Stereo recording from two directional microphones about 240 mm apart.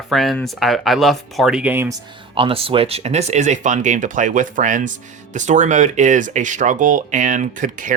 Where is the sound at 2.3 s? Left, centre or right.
Right.